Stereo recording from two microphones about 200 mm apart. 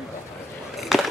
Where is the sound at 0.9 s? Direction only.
Centre (ahead or behind).